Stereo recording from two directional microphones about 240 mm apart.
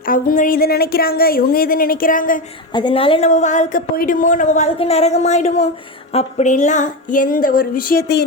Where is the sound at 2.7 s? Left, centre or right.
Left.